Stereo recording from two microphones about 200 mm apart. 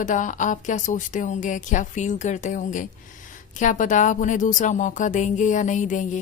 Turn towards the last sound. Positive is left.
turn(degrees=40)  # may be behind; listen again after turning